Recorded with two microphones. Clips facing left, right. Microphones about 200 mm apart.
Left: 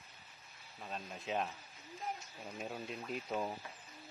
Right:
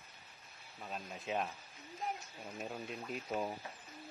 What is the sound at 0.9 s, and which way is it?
Speech, centre (ahead or behind).